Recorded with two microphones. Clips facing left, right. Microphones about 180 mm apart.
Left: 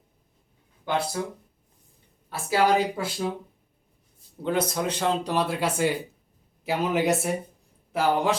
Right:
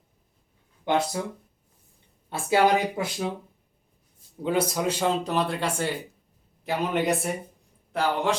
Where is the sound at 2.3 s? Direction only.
25° right (ahead or behind).